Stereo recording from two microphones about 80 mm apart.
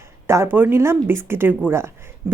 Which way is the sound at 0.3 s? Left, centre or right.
Right.